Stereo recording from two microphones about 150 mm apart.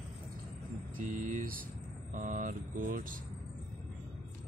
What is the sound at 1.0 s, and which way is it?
Speech, 60° right (ahead or behind).